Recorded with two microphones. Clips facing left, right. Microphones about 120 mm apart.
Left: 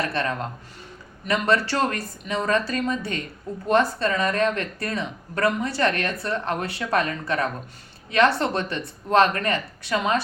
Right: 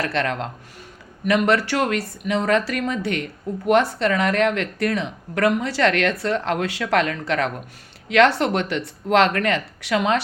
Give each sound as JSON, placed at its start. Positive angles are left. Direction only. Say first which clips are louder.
{"t": 0.1, "sound": "speech", "louder": "right 3 dB", "side_deg": -80}
{"t": 1.2, "sound": "speech", "louder": "right 4 dB", "side_deg": -60}
{"t": 1.7, "sound": "speech", "louder": "right 3 dB", "side_deg": -70}